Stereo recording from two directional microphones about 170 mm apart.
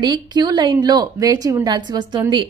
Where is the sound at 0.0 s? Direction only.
25° right (ahead or behind).